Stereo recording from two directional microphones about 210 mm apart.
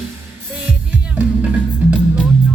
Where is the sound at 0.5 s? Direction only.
5° right (ahead or behind).